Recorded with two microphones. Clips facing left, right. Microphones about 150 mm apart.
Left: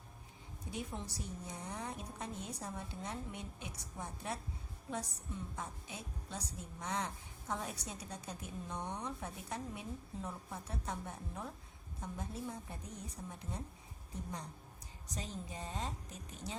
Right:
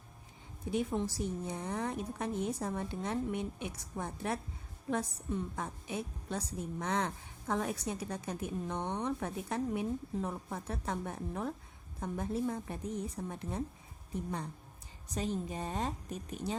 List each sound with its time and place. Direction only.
0.7 s a woman's voice: 60° right (ahead or behind)
15.1 s a woman's voice: 60° right (ahead or behind)